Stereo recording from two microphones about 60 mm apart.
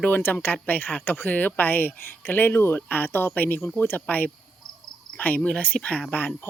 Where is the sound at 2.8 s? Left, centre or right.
Left.